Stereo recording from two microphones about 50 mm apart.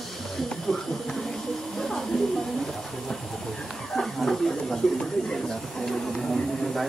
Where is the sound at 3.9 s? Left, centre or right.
Centre.